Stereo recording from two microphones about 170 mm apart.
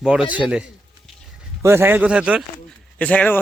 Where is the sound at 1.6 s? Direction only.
15° right (ahead or behind).